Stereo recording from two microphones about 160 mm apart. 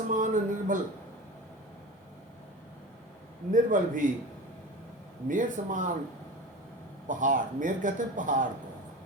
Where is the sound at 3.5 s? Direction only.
55° right (ahead or behind).